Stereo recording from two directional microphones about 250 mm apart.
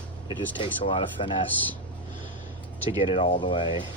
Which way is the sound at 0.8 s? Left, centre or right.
Left.